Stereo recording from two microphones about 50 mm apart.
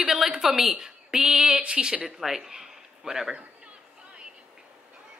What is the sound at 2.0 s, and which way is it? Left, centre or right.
Speech, centre.